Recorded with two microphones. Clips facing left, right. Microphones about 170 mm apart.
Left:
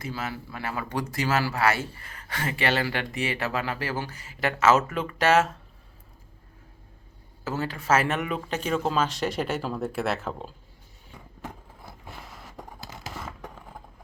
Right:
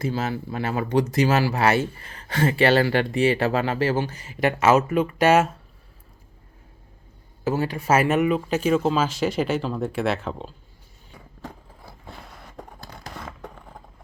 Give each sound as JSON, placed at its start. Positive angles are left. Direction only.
{"t": 0.0, "sound": "speech", "side_deg": -25}
{"t": 7.4, "sound": "speech", "side_deg": -15}
{"t": 12.1, "sound": "a sound", "side_deg": 0}